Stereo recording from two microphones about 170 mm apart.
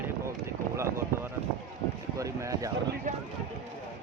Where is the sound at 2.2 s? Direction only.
20° right (ahead or behind).